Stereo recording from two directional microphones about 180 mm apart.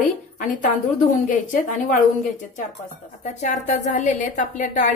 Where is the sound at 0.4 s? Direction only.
45° left (ahead or behind).